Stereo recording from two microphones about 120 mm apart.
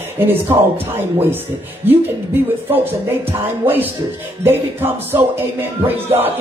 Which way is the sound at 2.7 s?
15° right (ahead or behind).